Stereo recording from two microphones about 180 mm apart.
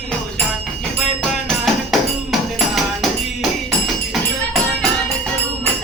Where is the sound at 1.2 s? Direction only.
Centre (ahead or behind).